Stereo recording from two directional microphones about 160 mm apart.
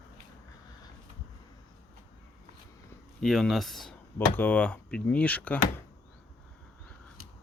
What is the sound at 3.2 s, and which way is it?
Speech, centre (ahead or behind).